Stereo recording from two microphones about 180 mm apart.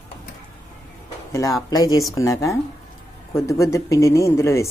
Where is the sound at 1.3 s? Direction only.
15° left (ahead or behind).